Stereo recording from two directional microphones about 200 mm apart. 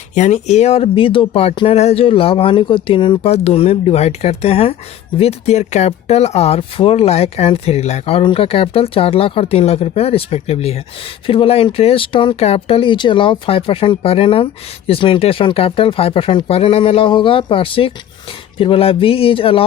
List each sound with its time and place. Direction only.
0.1 s speech: 35° left (ahead or behind)